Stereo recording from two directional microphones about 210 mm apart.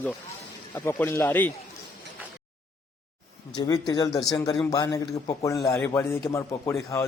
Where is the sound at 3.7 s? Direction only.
20° left (ahead or behind).